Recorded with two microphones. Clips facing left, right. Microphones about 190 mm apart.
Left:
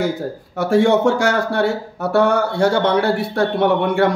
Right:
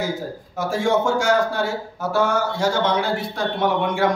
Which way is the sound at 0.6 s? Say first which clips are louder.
Left 6 dB; 65° left (ahead or behind).